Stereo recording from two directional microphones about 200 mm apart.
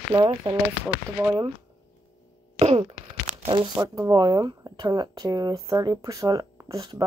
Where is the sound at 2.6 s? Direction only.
30° right (ahead or behind).